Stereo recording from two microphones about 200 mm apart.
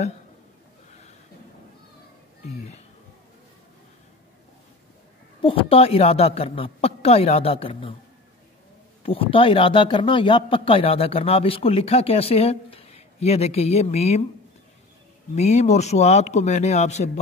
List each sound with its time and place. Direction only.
2.4 s speech: 35° left (ahead or behind)
5.4 s speech: 25° left (ahead or behind)
9.0 s speech: 30° left (ahead or behind)
15.3 s speech: 35° left (ahead or behind)